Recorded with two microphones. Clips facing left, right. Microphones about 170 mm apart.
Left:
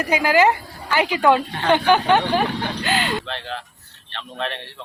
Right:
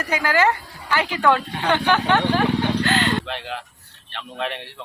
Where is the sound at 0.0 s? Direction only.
15° left (ahead or behind).